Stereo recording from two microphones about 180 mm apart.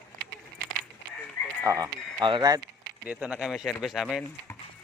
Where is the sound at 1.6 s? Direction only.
20° right (ahead or behind).